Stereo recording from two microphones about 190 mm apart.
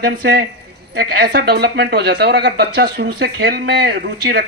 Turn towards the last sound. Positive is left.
turn(degrees=-60)  # may be behind; listen again after turning